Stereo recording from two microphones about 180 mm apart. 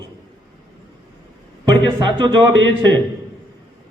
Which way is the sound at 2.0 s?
25° right (ahead or behind).